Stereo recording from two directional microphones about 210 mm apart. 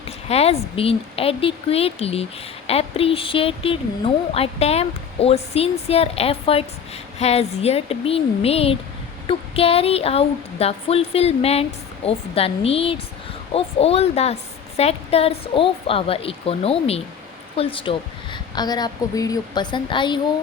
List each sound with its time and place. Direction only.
0.0 s a woman's voice: 30° left (ahead or behind)